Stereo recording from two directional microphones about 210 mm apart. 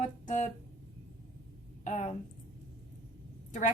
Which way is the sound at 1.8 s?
35° left (ahead or behind).